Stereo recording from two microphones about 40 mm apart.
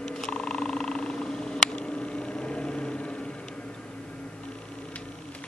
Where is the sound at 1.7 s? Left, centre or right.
Left.